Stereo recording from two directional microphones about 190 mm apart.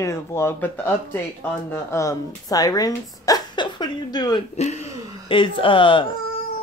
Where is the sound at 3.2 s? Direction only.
20° left (ahead or behind).